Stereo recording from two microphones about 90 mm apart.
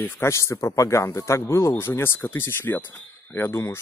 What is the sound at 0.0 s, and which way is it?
Speech, 30° left (ahead or behind).